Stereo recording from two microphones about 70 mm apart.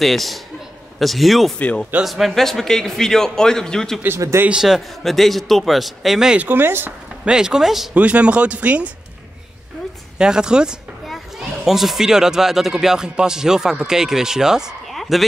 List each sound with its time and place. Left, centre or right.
0.0 s a man's voice: centre
4.5 s a man's voice: centre
6.3 s speech: right
7.2 s speech: centre
7.9 s speech: centre
10.1 s speech: centre
15.0 s a sound: centre